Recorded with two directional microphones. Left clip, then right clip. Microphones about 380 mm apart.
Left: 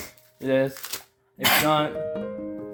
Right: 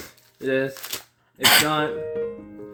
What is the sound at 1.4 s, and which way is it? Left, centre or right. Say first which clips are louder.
Speech: right 4 dB; right.